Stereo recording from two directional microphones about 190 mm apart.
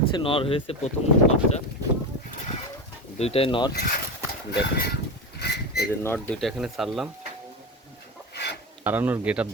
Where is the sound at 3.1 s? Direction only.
35° left (ahead or behind).